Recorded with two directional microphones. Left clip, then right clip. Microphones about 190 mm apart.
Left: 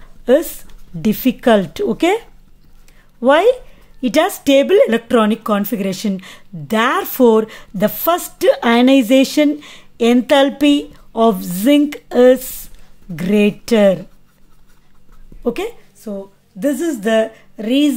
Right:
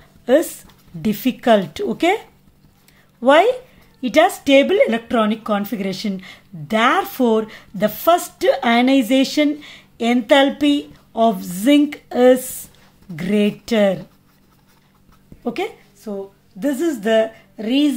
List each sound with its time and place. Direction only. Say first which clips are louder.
0.2 s speech: left 2 dB; 25° left (ahead or behind)
15.4 s a woman's voice: left 3 dB; 25° left (ahead or behind)